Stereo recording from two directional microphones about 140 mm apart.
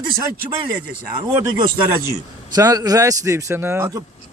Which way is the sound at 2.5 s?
25° right (ahead or behind).